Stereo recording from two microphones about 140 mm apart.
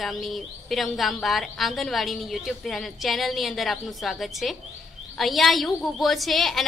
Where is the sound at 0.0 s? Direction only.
Centre (ahead or behind).